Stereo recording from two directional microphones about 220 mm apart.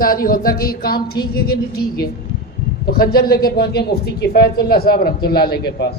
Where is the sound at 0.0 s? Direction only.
40° left (ahead or behind).